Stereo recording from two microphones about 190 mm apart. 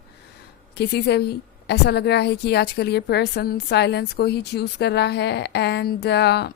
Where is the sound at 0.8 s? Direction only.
60° left (ahead or behind).